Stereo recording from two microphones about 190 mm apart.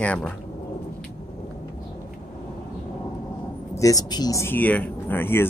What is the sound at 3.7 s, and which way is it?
Speech, 20° left (ahead or behind).